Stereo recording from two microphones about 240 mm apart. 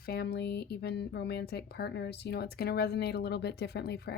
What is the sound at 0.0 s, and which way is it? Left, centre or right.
A woman's voice, left.